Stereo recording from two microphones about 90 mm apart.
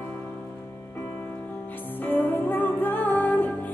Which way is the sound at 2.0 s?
20° left (ahead or behind).